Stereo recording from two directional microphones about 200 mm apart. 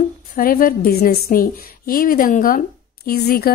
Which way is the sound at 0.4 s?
45° left (ahead or behind).